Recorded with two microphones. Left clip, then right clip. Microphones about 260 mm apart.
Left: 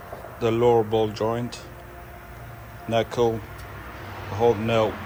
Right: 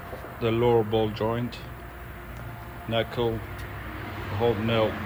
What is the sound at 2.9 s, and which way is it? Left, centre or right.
Speech, centre.